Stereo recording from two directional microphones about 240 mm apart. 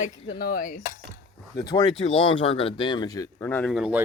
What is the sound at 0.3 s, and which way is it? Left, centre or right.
Speech, left.